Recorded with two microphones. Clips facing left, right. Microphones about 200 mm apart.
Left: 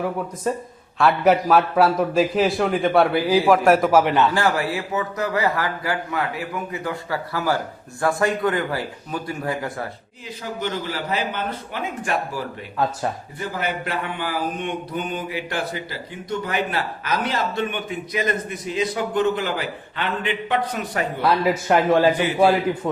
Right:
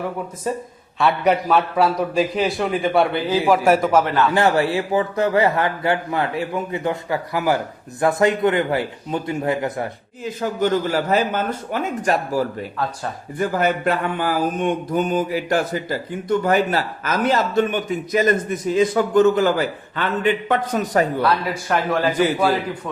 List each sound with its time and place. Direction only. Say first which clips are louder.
0.5 s a man's voice: right 1 dB; centre (ahead or behind)
4.0 s a man's voice: left 1 dB; 20° left (ahead or behind)
4.4 s a man's voice: right 4 dB; 25° right (ahead or behind)
10.2 s mantra: right 8 dB; 50° right (ahead or behind)
21.4 s a man's voice: left 4 dB; 25° left (ahead or behind)